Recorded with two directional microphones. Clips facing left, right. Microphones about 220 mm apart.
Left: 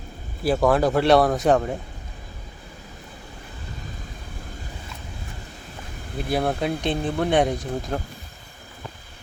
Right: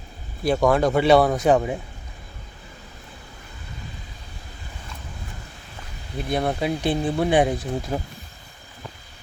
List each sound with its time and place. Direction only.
0.4 s speech: centre (ahead or behind)
6.1 s speech: centre (ahead or behind)